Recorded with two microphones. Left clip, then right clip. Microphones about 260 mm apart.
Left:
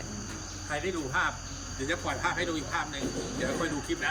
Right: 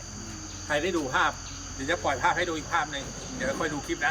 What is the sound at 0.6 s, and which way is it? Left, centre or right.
Cricket, right.